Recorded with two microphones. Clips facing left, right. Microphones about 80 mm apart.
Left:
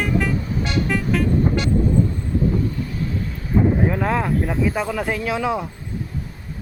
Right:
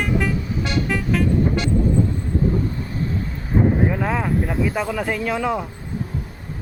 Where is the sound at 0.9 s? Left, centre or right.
Centre.